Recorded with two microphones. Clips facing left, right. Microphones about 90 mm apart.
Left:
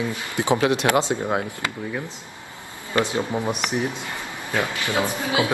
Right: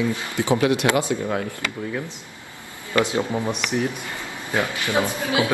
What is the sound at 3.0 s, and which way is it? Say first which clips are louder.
Speech: right 1 dB; 25° left (ahead or behind).